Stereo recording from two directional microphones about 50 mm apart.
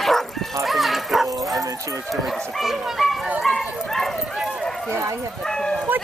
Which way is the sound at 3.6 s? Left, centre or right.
Centre.